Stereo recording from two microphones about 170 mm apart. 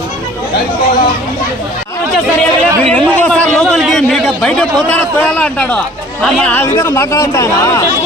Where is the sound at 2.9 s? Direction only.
10° left (ahead or behind).